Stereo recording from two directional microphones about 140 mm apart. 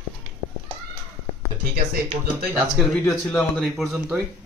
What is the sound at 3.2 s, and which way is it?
Speech, 10° left (ahead or behind).